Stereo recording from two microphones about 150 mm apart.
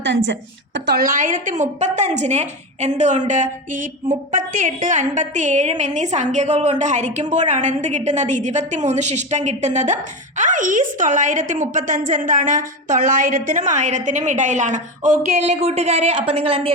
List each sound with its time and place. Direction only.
0.9 s a woman's voice: 65° right (ahead or behind); by 16.7 s 45° right (ahead or behind)